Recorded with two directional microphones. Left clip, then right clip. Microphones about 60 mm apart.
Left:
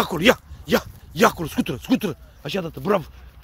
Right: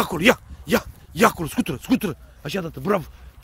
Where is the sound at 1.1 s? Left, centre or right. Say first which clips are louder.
Even; right.